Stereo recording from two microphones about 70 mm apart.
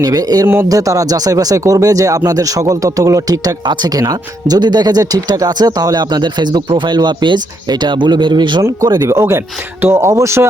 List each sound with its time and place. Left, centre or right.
0.0 s speech: right
0.4 s speech: right
0.7 s speech: right
8.6 s speech: right